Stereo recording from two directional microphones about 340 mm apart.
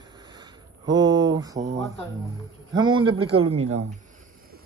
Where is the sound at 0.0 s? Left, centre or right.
Centre.